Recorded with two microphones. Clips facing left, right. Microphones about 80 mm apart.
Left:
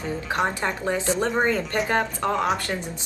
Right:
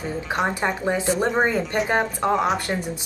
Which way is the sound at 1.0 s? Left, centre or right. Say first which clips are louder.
Right 1 dB; centre.